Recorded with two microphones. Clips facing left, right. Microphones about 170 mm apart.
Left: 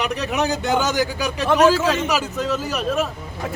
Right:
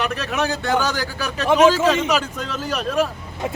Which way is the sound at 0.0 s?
15° left (ahead or behind).